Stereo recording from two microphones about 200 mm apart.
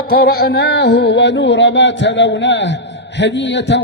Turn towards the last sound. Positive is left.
turn(degrees=60)  # may be behind; listen again after turning